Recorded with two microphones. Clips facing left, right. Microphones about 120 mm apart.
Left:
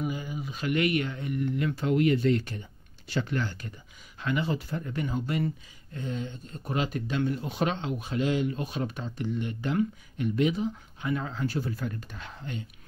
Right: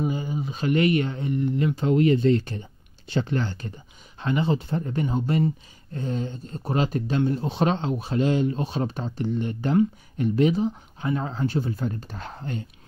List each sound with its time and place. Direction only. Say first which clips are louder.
0.0 s speech: right 6 dB; 30° right (ahead or behind)